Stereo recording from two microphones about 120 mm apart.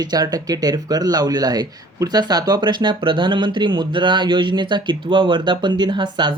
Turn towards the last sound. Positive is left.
turn(degrees=-40)  # may be behind; listen again after turning